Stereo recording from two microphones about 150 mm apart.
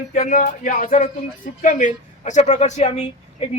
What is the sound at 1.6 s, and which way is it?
A woman's voice, 55° left (ahead or behind).